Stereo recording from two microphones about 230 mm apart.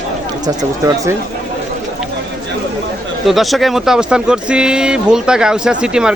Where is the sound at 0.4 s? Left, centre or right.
Centre.